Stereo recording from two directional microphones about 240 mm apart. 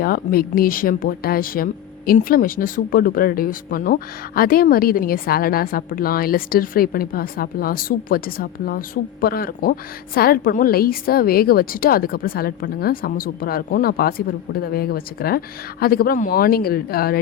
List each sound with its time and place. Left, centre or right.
0.0 s a woman's voice: left